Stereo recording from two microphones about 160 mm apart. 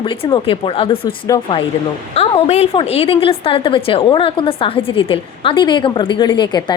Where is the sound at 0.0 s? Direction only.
30° left (ahead or behind).